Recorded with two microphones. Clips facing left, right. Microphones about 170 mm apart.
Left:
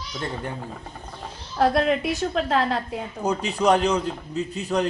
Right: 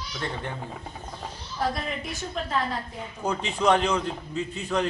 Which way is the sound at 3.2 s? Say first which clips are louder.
Left 2 dB; 10° left (ahead or behind).